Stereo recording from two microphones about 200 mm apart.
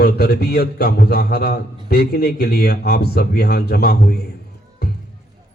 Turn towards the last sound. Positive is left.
turn(degrees=50)  # may be behind; listen again after turning